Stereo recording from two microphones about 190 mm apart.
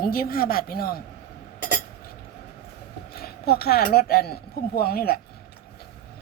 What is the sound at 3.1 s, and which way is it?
Speech, 55° left (ahead or behind).